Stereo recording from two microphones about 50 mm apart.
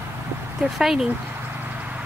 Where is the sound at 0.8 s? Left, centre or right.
Centre.